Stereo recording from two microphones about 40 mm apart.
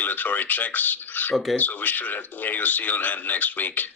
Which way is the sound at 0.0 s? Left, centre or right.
Left.